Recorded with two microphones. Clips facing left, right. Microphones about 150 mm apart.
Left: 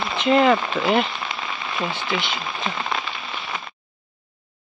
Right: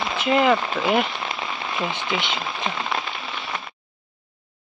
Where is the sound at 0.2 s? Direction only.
10° right (ahead or behind).